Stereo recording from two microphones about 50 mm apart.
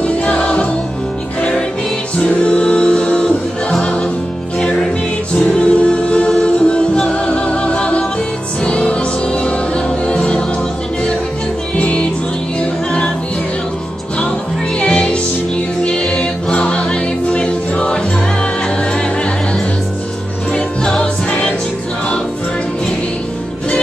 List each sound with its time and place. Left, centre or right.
0.0 s music: left
2.2 s music: left
5.4 s a capella: left
8.6 s music: left
11.8 s music: left
14.8 s music: left
20.5 s music: centre